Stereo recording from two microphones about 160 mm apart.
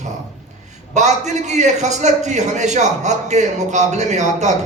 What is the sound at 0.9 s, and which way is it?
A man's voice, 45° right (ahead or behind).